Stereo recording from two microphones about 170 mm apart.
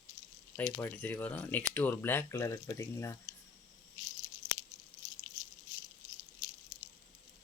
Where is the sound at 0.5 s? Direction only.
10° left (ahead or behind).